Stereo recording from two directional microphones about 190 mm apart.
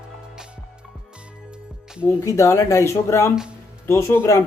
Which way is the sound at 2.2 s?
15° left (ahead or behind).